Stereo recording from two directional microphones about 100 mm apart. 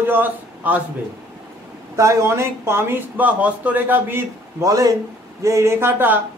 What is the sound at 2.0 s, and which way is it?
Speech, 30° right (ahead or behind).